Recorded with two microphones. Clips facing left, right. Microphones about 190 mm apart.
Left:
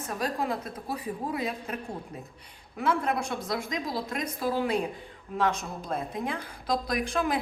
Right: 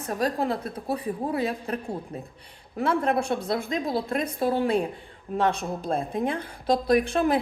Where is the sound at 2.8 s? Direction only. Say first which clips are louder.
Right 4 dB; 30° right (ahead or behind).